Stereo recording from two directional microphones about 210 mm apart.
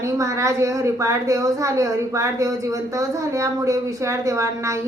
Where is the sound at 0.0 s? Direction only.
15° right (ahead or behind).